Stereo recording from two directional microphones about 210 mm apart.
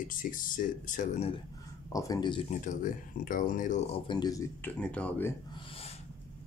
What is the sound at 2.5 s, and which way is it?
Speech, 35° left (ahead or behind).